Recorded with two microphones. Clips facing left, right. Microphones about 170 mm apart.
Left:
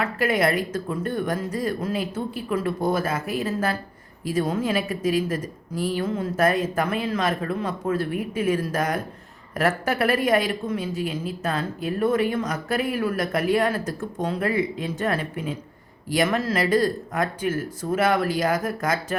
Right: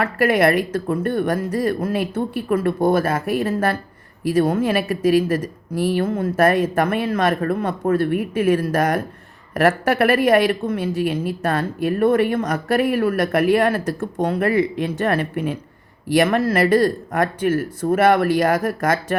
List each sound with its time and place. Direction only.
0.0 s speech: 65° right (ahead or behind)